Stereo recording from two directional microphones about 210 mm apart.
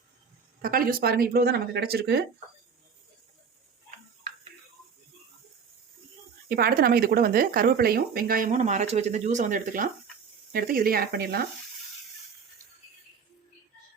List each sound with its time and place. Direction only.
0.6 s speech: 45° right (ahead or behind)
6.5 s speech: 45° right (ahead or behind)